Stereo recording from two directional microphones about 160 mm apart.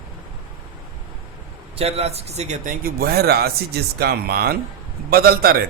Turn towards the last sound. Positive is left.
turn(degrees=-70)  # may be behind; listen again after turning